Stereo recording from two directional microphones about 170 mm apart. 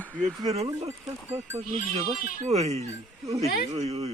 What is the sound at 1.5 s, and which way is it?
Speech, 40° right (ahead or behind).